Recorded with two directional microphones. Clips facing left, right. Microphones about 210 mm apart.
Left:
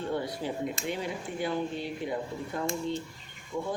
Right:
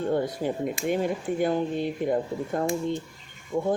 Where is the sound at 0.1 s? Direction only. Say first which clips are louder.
Right 5 dB; 50° right (ahead or behind).